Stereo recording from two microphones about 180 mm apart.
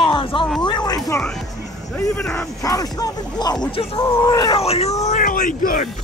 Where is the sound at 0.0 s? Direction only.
30° left (ahead or behind).